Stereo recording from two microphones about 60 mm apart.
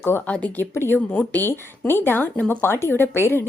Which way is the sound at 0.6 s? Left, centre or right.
Left.